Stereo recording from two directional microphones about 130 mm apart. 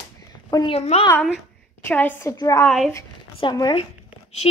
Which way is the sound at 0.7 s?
50° left (ahead or behind).